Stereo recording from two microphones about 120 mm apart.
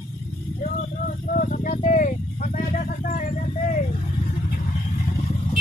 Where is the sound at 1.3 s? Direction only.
90° left.